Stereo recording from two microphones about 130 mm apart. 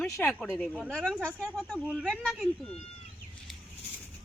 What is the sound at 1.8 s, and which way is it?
Speech, 10° right (ahead or behind).